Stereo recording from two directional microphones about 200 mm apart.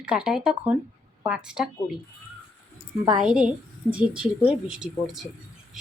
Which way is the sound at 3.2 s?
5° right (ahead or behind).